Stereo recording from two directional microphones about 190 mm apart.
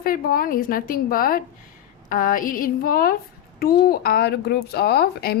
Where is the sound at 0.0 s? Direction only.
50° left (ahead or behind).